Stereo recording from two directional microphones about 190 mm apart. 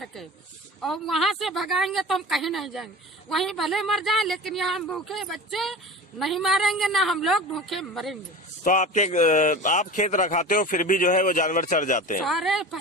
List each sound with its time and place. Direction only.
0.0 s a sound: centre (ahead or behind)
0.8 s a woman's voice: centre (ahead or behind)
8.6 s a man's voice: 40° left (ahead or behind)
12.2 s a woman's voice: centre (ahead or behind)